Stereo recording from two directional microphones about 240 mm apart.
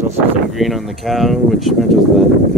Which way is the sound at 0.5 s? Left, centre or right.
Centre.